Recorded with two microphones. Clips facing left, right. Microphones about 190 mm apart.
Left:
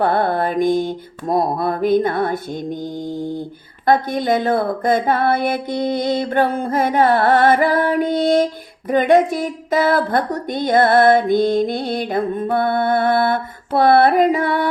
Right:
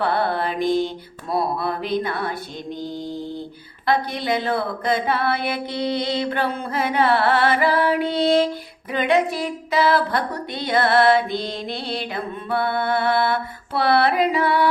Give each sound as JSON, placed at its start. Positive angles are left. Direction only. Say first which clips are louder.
{"t": 0.0, "sound": "speech", "louder": "left 4 dB", "side_deg": 45}
{"t": 3.8, "sound": "speech", "louder": "left 5 dB", "side_deg": 50}